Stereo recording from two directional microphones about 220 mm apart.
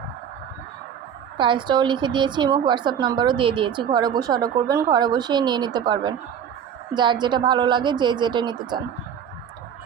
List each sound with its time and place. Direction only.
1.4 s a woman's voice: 20° right (ahead or behind)